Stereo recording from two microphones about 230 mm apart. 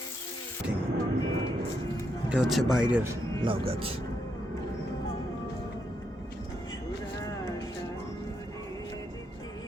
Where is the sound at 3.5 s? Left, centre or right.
Right.